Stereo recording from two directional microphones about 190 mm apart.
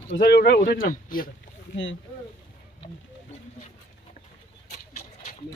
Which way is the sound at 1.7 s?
75° left (ahead or behind).